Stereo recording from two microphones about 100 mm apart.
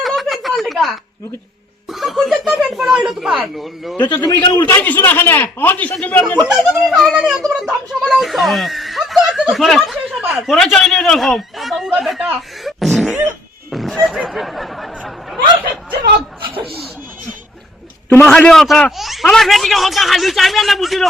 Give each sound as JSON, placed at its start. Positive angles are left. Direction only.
{"t": 0.0, "sound": "a sound", "side_deg": 0}
{"t": 1.9, "sound": "speech", "side_deg": 0}
{"t": 3.9, "sound": "a man's voice", "side_deg": 45}
{"t": 4.6, "sound": "a man's voice", "side_deg": 15}
{"t": 6.7, "sound": "speech", "side_deg": 0}
{"t": 12.6, "sound": "beatboxing", "side_deg": 0}
{"t": 13.7, "sound": "a sound", "side_deg": 0}
{"t": 16.5, "sound": "laughter", "side_deg": -65}
{"t": 18.3, "sound": "speech", "side_deg": 5}